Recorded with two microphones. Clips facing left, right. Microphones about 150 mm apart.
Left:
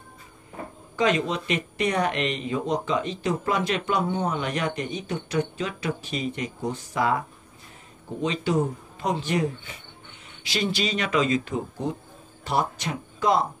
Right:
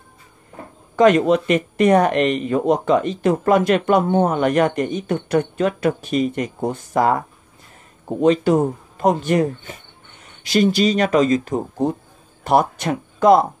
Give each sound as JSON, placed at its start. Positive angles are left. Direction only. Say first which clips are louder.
{"t": 0.9, "sound": "speech", "louder": "right 10 dB", "side_deg": -55}
{"t": 12.4, "sound": "speech", "louder": "right 9 dB", "side_deg": -55}